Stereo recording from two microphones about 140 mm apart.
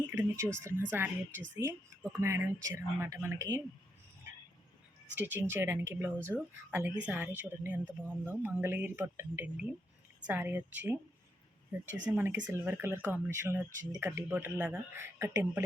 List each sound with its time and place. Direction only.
0.3 s speech: 20° right (ahead or behind)
5.1 s speech: 15° right (ahead or behind)
12.1 s speech: 15° right (ahead or behind)